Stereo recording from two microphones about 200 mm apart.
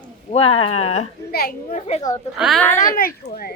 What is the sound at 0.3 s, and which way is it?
Speech, 30° left (ahead or behind).